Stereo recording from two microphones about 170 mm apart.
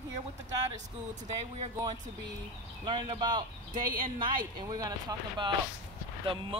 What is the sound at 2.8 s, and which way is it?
Speech, 30° right (ahead or behind).